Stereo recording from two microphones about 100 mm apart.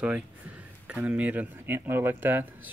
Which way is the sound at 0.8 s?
15° right (ahead or behind).